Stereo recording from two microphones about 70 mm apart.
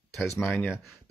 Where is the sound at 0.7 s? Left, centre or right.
Centre.